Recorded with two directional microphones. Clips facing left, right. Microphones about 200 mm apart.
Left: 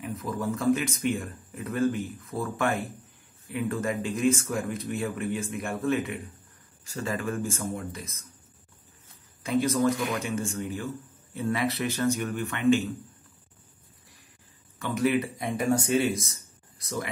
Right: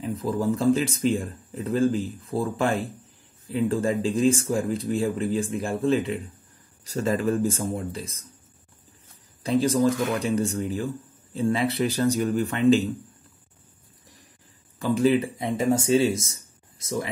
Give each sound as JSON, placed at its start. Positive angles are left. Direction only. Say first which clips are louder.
{"t": 0.0, "sound": "speech", "louder": "right 6 dB", "side_deg": -30}
{"t": 6.8, "sound": "speech", "louder": "right 7 dB", "side_deg": -40}
{"t": 9.4, "sound": "speech", "louder": "right 3 dB", "side_deg": -35}
{"t": 14.8, "sound": "speech", "louder": "right 5 dB", "side_deg": -30}